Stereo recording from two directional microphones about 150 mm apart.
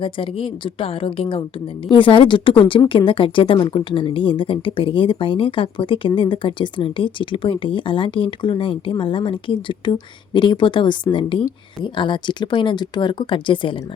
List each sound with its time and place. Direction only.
0.0 s a woman's voice: 35° left (ahead or behind)